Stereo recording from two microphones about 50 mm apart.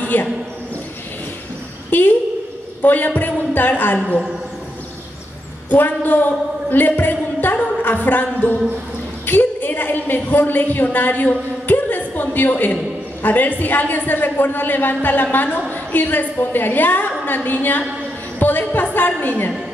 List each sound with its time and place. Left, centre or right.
0.0 s a sound: left
1.9 s a woman's voice: left
5.7 s a woman's voice: left